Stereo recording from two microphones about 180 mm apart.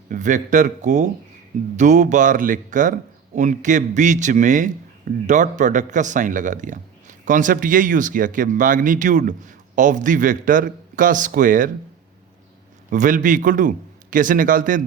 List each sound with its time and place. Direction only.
0.1 s a man's voice: 45° right (ahead or behind)
12.9 s a man's voice: 45° right (ahead or behind)